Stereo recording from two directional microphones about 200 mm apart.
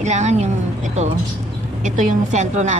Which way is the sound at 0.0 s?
35° right (ahead or behind).